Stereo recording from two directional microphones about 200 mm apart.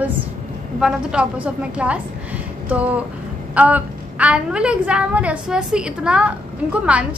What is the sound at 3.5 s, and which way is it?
A woman's voice, 5° right (ahead or behind).